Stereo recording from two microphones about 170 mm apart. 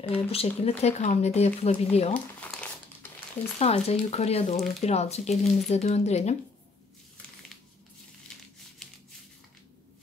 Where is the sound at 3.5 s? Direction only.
40° left (ahead or behind).